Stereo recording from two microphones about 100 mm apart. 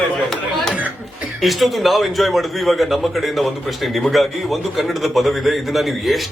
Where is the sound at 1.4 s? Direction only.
Centre (ahead or behind).